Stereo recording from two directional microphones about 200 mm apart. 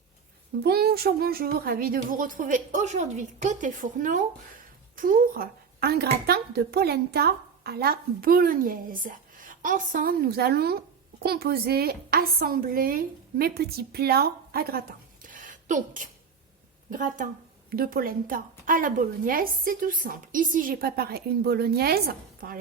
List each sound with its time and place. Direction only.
0.6 s a woman's voice: 50° right (ahead or behind)